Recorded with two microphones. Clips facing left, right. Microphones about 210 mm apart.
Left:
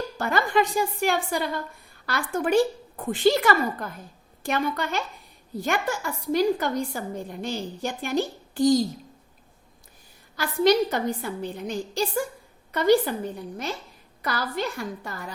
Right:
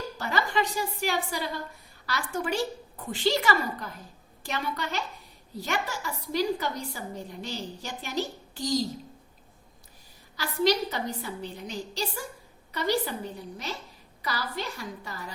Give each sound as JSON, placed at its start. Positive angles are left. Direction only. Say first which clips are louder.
{"t": 0.2, "sound": "a woman's voice", "louder": "left 5 dB", "side_deg": 50}
{"t": 10.3, "sound": "a woman's voice", "louder": "left 5 dB", "side_deg": 50}
{"t": 14.2, "sound": "a woman's voice", "louder": "left 5 dB", "side_deg": 55}